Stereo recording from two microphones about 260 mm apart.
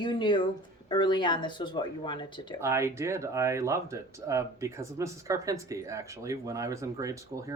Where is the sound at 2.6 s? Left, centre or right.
Centre.